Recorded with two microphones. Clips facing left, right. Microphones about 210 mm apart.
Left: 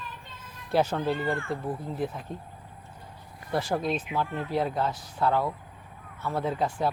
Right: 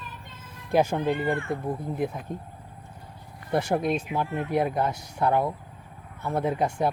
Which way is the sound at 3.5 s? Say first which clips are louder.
Right 3 dB; 20° right (ahead or behind).